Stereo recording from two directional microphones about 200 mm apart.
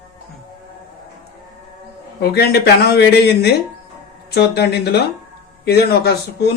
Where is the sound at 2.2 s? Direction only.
50° left (ahead or behind).